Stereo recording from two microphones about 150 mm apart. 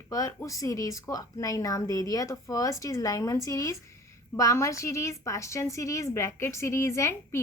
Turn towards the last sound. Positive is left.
turn(degrees=20)  # may be behind; listen again after turning